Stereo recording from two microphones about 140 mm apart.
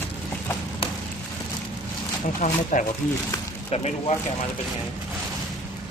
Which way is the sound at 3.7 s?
50° left (ahead or behind).